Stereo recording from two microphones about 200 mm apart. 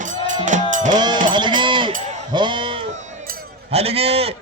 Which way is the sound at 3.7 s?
30° right (ahead or behind).